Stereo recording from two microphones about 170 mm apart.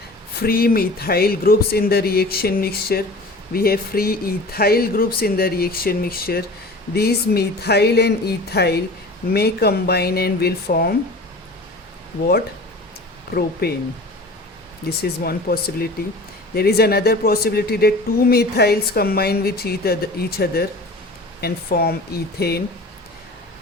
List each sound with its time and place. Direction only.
0.3 s speech: 60° left (ahead or behind)
13.3 s speech: 70° left (ahead or behind)
14.8 s speech: 65° left (ahead or behind)